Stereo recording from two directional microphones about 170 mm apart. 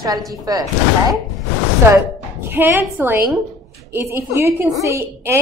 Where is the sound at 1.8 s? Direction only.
15° right (ahead or behind).